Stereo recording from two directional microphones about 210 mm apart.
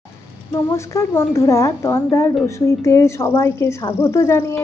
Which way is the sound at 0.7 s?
10° left (ahead or behind).